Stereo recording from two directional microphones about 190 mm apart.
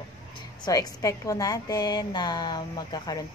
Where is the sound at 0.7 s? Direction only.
20° left (ahead or behind).